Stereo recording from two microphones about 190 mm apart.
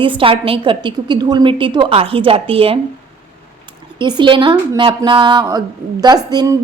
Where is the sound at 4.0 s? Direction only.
25° right (ahead or behind).